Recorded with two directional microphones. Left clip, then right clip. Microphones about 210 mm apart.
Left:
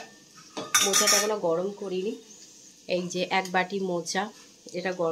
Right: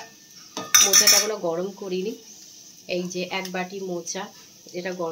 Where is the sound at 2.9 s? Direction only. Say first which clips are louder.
Left 1 dB; 20° left (ahead or behind).